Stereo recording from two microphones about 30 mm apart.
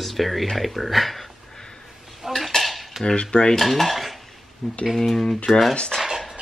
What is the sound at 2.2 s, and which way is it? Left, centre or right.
Dishes, centre.